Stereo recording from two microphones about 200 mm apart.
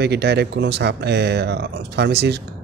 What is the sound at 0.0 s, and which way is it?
Speech, 55° right (ahead or behind).